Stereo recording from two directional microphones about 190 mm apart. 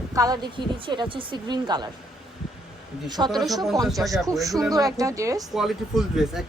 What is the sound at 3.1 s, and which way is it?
Speech, 20° right (ahead or behind).